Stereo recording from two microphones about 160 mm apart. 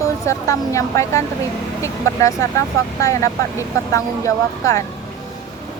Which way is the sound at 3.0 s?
20° left (ahead or behind).